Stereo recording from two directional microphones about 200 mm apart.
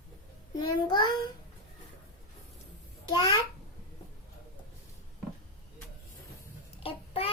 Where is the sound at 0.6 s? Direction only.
20° left (ahead or behind).